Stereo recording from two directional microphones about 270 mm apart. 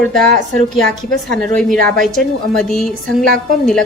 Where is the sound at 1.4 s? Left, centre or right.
Centre.